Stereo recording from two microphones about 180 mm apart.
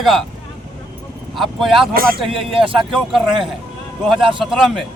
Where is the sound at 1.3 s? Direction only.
Centre (ahead or behind).